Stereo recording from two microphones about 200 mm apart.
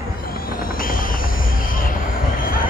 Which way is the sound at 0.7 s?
45° left (ahead or behind).